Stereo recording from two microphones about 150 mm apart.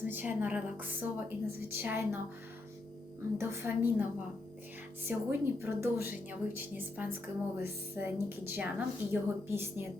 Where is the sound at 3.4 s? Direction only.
15° right (ahead or behind).